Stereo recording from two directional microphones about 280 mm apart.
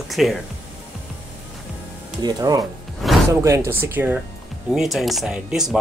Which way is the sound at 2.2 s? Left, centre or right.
Centre.